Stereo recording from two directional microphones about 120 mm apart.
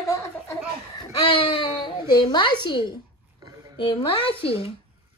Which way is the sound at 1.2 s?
50° left (ahead or behind).